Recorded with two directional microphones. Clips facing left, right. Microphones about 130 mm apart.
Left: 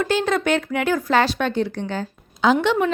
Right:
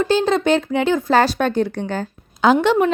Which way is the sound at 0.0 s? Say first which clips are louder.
Right 4 dB; 30° right (ahead or behind).